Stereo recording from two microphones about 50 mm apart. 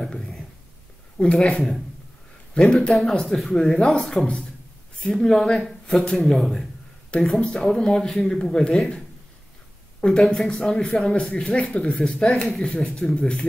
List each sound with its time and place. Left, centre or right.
1.1 s speech: centre
2.6 s speech: centre
2.9 s speech: centre
7.2 s speech: centre
10.0 s speech: centre